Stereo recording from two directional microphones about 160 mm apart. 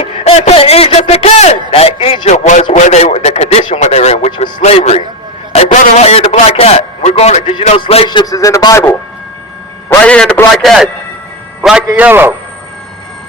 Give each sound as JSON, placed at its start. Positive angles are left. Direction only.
{"t": 0.0, "sound": "a man's voice", "side_deg": 40}
{"t": 2.3, "sound": "a man's voice", "side_deg": 50}
{"t": 5.5, "sound": "a sound", "side_deg": 40}
{"t": 7.8, "sound": "a man's voice", "side_deg": 35}
{"t": 10.0, "sound": "a man's voice", "side_deg": 5}